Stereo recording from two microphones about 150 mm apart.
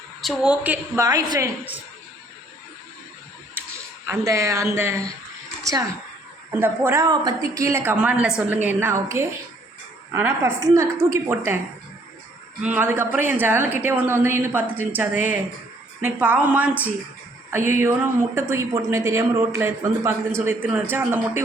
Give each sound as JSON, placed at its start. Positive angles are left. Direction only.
{"t": 0.2, "sound": "a woman's voice", "side_deg": 0}
{"t": 1.0, "sound": "speech", "side_deg": -20}
{"t": 3.6, "sound": "a sound", "side_deg": -15}
{"t": 4.0, "sound": "a woman's voice", "side_deg": -15}
{"t": 7.0, "sound": "a woman's voice", "side_deg": -25}
{"t": 12.6, "sound": "a woman's voice", "side_deg": -10}